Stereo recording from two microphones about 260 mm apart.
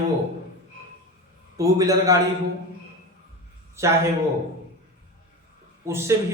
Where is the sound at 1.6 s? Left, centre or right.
Centre.